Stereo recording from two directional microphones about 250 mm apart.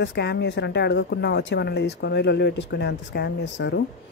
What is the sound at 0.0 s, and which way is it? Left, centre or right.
A woman's voice, left.